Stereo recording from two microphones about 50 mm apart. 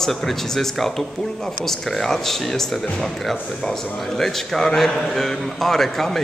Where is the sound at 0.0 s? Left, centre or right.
Centre.